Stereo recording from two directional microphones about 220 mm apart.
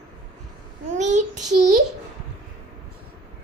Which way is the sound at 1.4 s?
90° right.